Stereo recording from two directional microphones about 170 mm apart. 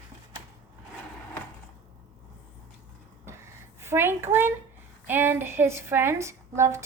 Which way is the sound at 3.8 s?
15° right (ahead or behind).